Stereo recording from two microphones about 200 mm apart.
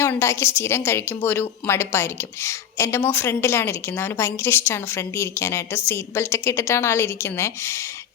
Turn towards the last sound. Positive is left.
turn(degrees=15)  # may be behind; listen again after turning